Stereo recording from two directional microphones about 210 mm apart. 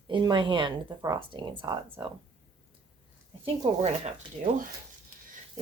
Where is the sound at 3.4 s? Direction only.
30° right (ahead or behind).